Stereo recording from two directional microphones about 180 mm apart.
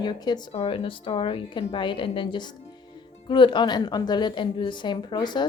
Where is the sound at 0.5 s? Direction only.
35° left (ahead or behind).